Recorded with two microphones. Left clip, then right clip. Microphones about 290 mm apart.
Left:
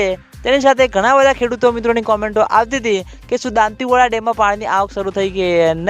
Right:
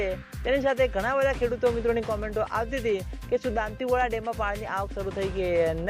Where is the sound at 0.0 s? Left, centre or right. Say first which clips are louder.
Left 12 dB; left.